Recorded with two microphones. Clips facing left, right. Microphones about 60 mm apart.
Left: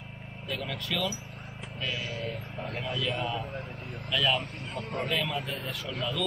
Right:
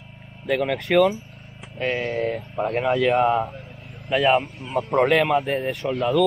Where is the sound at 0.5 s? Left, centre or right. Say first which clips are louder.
Right 13 dB; right.